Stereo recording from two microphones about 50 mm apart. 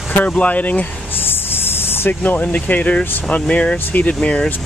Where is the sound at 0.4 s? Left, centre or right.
Left.